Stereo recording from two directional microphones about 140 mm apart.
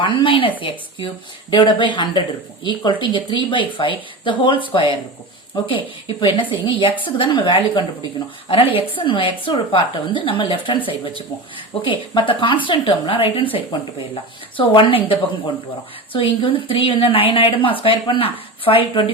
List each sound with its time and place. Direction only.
0.0 s a woman's voice: 35° left (ahead or behind)